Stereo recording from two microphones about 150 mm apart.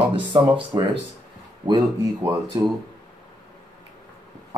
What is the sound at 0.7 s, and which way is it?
Speech, 20° right (ahead or behind).